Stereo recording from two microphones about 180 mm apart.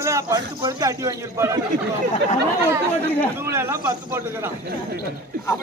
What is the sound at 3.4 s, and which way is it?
A man's voice, 15° right (ahead or behind).